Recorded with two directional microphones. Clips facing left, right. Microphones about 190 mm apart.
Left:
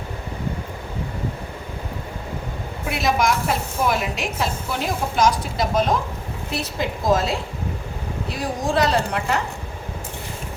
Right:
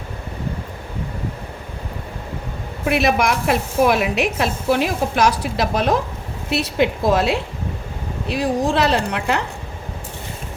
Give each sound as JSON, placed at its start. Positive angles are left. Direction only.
{"t": 2.9, "sound": "speech", "side_deg": -65}